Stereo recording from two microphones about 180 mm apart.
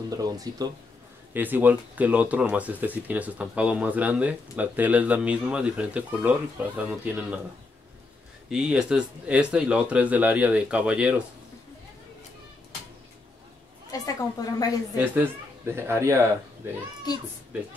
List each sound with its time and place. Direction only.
0.1 s speech: 20° right (ahead or behind)
8.5 s speech: 5° right (ahead or behind)
13.9 s speech: 20° left (ahead or behind)
15.0 s speech: 10° right (ahead or behind)